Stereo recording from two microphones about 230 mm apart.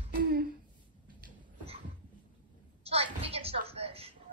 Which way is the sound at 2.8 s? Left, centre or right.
Right.